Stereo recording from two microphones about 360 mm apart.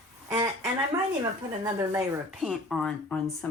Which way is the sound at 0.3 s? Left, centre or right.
Centre.